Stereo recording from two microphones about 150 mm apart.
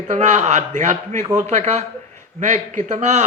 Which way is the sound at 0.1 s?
50° right (ahead or behind).